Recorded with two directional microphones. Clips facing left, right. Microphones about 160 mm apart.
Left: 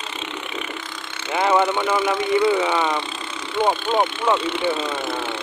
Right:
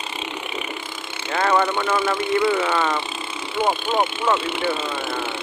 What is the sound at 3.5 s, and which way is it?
Speech, 5° right (ahead or behind).